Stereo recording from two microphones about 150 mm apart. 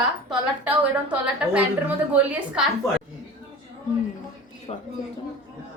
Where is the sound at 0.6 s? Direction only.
10° right (ahead or behind).